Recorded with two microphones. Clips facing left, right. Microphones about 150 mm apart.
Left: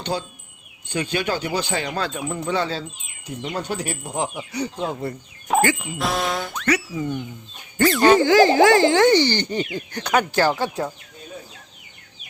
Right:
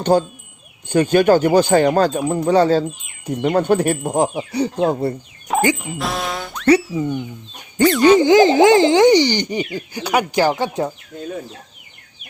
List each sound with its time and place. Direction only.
0.0 s speech: 45° right (ahead or behind)
5.5 s music: centre (ahead or behind)
6.0 s boing: centre (ahead or behind)
6.9 s speech: centre (ahead or behind)
7.8 s speech: 15° right (ahead or behind)